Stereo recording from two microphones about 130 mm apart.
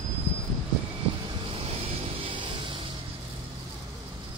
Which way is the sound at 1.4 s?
50° right (ahead or behind).